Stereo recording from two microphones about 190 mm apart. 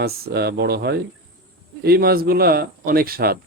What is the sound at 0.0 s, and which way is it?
A man's voice, 60° right (ahead or behind).